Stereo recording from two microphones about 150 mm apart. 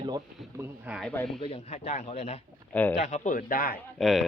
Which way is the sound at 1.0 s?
5° left (ahead or behind).